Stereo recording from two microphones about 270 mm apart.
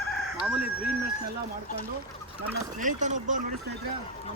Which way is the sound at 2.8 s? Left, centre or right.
Right.